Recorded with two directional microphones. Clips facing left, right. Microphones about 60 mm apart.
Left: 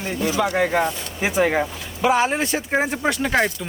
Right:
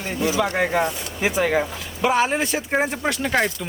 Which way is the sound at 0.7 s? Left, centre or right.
Centre.